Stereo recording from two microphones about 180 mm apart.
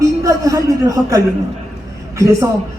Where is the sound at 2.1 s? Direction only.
15° right (ahead or behind).